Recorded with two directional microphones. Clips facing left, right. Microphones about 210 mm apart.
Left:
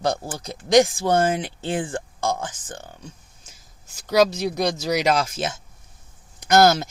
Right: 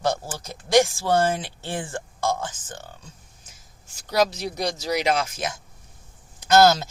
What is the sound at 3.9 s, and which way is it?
Speech, 50° left (ahead or behind).